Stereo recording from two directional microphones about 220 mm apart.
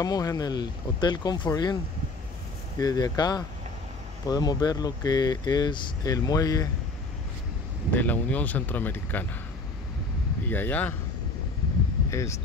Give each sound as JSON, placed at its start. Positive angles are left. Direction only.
{"t": 0.0, "sound": "speech", "side_deg": 15}
{"t": 2.8, "sound": "speech", "side_deg": 15}
{"t": 7.9, "sound": "speech", "side_deg": 5}
{"t": 10.4, "sound": "speech", "side_deg": 10}
{"t": 12.1, "sound": "speech", "side_deg": 15}